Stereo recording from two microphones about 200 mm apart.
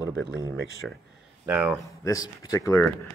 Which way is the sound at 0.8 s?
5° left (ahead or behind).